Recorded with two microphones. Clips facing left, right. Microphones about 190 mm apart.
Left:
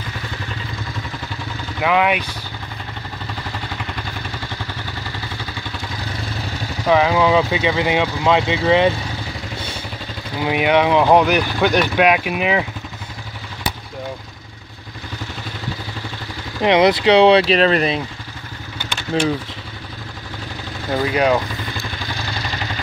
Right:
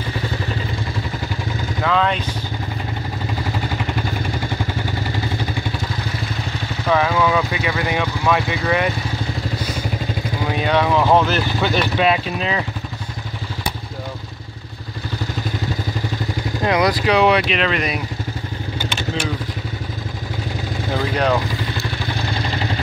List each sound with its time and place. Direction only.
1.8 s speech: 15° left (ahead or behind)
6.9 s speech: 15° left (ahead or behind)
10.5 s speech: 15° left (ahead or behind)
16.6 s speech: 25° left (ahead or behind)
21.1 s speech: 5° left (ahead or behind)